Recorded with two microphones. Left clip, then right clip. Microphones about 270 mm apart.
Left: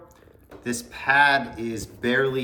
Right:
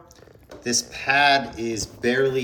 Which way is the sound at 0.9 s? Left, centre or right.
Centre.